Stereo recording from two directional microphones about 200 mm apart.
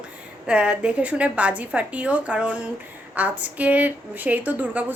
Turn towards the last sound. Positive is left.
turn(degrees=-10)  # may be behind; listen again after turning